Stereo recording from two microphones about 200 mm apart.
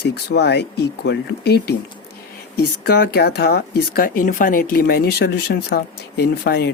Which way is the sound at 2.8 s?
50° left (ahead or behind).